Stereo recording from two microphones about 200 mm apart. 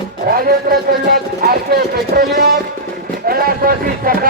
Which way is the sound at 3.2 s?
45° right (ahead or behind).